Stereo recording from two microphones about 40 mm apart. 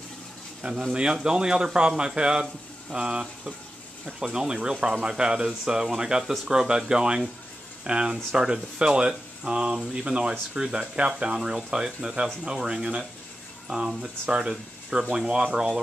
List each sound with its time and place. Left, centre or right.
0.6 s speech: right